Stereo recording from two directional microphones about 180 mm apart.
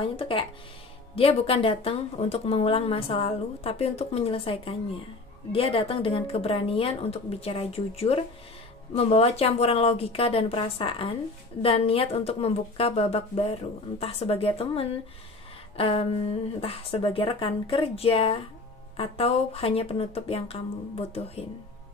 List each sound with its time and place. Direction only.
0.0 s a woman's voice: 30° left (ahead or behind)